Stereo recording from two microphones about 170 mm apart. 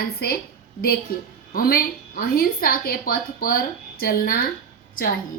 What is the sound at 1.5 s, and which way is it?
A woman's voice, 55° left (ahead or behind).